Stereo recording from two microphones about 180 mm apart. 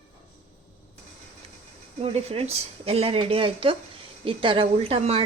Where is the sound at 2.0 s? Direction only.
35° right (ahead or behind).